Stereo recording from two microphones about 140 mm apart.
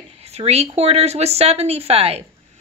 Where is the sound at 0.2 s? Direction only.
50° right (ahead or behind).